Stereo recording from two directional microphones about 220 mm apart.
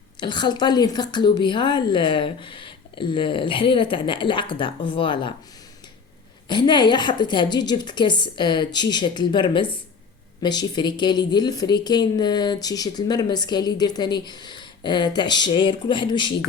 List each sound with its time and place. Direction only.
0.2 s a woman's voice: 20° left (ahead or behind)
6.5 s a woman's voice: 20° left (ahead or behind)